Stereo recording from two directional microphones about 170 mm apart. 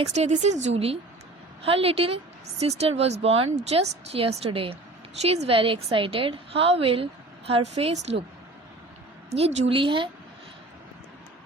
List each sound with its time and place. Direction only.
0.1 s a woman's voice: 40° right (ahead or behind)
9.3 s a woman's voice: 35° right (ahead or behind)